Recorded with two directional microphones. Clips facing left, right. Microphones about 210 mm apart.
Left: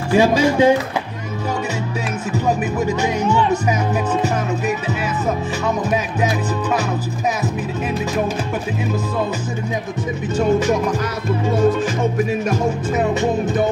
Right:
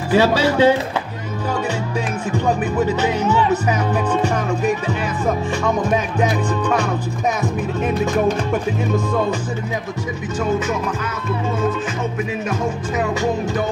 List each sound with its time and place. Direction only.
0.1 s speech: 15° left (ahead or behind)
2.3 s speech: 10° left (ahead or behind)
7.4 s music: centre (ahead or behind)
13.2 s music: 20° left (ahead or behind)